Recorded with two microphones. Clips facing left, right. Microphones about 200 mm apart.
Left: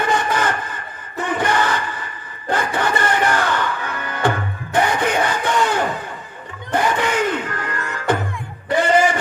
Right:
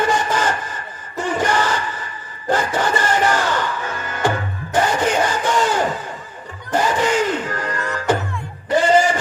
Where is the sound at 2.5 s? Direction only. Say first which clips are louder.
Right 1 dB; 55° left (ahead or behind).